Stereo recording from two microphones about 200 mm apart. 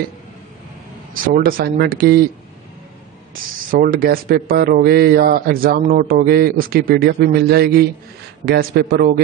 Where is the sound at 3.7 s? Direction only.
45° right (ahead or behind).